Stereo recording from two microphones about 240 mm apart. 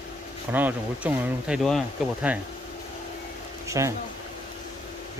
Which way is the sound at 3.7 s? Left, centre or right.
Centre.